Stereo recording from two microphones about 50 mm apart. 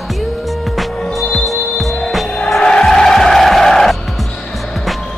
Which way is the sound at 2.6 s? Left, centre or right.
Centre.